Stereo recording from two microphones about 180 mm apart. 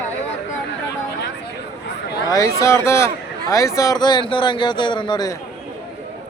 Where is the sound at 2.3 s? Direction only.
20° left (ahead or behind).